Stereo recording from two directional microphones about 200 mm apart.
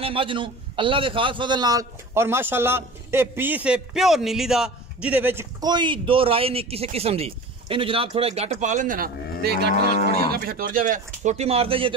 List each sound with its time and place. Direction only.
0.0 s a man's voice: 25° right (ahead or behind)